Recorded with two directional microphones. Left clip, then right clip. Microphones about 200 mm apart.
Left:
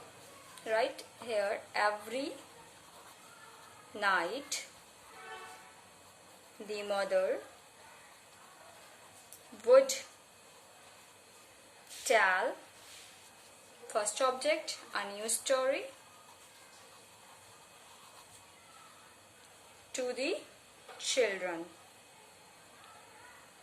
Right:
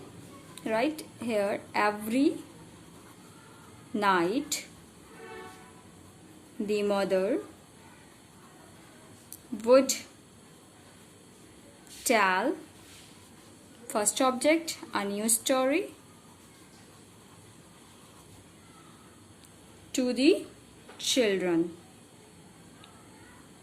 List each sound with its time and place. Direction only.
0.6 s a woman's voice: 45° right (ahead or behind)
4.0 s a woman's voice: 45° right (ahead or behind)
6.7 s a woman's voice: 45° right (ahead or behind)
9.6 s a woman's voice: 45° right (ahead or behind)
12.0 s a woman's voice: 50° right (ahead or behind)
13.9 s a woman's voice: 45° right (ahead or behind)
19.9 s a woman's voice: 50° right (ahead or behind)